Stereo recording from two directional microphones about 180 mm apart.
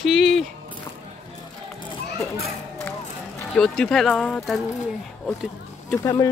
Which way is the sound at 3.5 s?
Centre (ahead or behind).